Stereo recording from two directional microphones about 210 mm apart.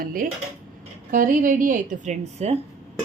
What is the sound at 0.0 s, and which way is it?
A woman's voice, 40° right (ahead or behind).